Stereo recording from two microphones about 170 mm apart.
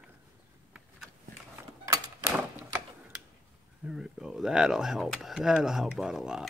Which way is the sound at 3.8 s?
5° right (ahead or behind).